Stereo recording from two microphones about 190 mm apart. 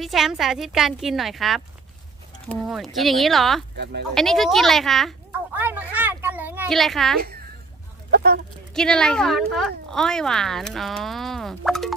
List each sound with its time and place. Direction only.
0.0 s speech: centre (ahead or behind)
2.6 s speech: centre (ahead or behind)
3.7 s speech: 60° right (ahead or behind)
4.1 s speech: centre (ahead or behind)
5.5 s a sound: 10° right (ahead or behind)
6.7 s speech: centre (ahead or behind)
8.1 s speech: 55° right (ahead or behind)
8.7 s speech: 5° left (ahead or behind)